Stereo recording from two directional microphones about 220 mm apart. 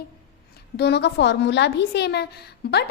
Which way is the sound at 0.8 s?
50° left (ahead or behind).